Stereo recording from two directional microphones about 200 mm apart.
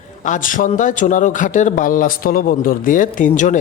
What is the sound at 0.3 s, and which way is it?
A man's voice, 40° left (ahead or behind).